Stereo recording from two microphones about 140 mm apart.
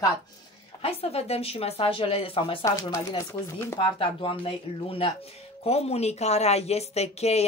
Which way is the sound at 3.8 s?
40° left (ahead or behind).